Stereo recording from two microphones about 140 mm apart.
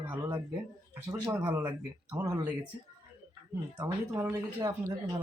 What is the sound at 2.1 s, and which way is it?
Speech, 30° right (ahead or behind).